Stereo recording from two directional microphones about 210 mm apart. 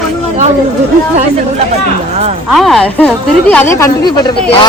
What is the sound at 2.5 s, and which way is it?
Speech, centre (ahead or behind).